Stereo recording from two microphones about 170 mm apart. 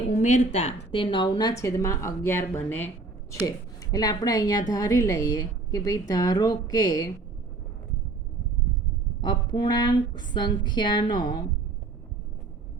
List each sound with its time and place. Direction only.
0.2 s a woman's voice: 45° left (ahead or behind); by 7.1 s 20° left (ahead or behind)
9.2 s a woman's voice: 25° left (ahead or behind)